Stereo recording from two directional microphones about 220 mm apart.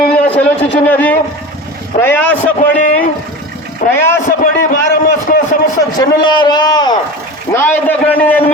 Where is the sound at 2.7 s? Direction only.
40° left (ahead or behind).